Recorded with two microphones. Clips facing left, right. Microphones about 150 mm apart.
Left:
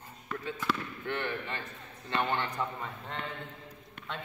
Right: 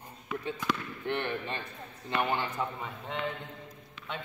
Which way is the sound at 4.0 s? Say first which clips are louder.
Even; 60° left (ahead or behind).